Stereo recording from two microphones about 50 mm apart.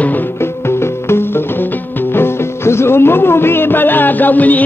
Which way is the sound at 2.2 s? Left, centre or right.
Left.